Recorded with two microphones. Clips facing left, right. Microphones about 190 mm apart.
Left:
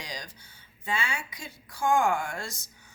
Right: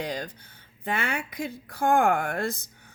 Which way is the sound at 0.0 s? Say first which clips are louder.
Right 9 dB; 55° right (ahead or behind).